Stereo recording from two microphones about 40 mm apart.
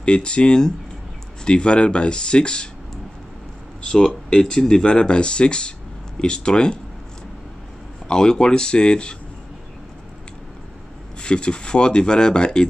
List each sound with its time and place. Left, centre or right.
0.0 s speech: left
3.8 s speech: centre
8.1 s speech: centre
11.1 s speech: left